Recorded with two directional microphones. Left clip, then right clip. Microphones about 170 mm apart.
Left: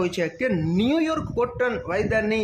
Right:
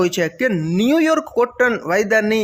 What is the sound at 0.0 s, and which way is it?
Speech, 25° right (ahead or behind).